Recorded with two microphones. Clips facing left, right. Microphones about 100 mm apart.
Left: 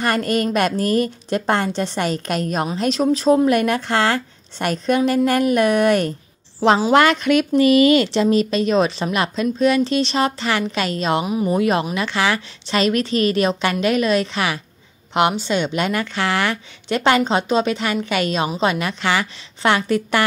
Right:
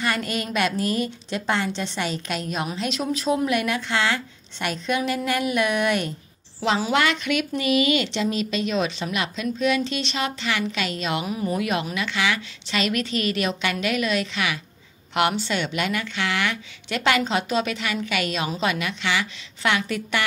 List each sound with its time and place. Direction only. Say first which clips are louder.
0.0 s a woman's voice: left 7 dB; 45° left (ahead or behind)
11.2 s speech: left 6 dB; 20° left (ahead or behind)
11.5 s speech: left 7 dB; 35° left (ahead or behind)
15.1 s speech: left 5 dB; 20° left (ahead or behind); by 20.2 s 40° left (ahead or behind)